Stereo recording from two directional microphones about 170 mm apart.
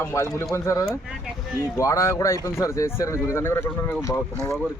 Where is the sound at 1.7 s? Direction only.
20° left (ahead or behind).